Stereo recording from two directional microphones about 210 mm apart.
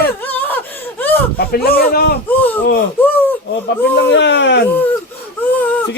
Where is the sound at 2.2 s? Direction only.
10° left (ahead or behind).